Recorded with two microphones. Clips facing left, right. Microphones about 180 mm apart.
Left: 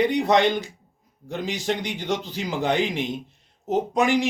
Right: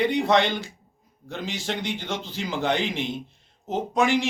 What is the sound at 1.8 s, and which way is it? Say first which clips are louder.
Speech: left 3 dB; 15° left (ahead or behind).